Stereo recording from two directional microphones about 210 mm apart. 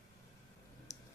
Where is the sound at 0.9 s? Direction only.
15° left (ahead or behind).